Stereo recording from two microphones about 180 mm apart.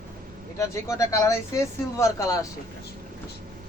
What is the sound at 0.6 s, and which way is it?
Speech, 15° left (ahead or behind).